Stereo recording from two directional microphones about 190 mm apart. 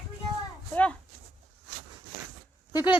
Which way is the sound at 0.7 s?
5° left (ahead or behind).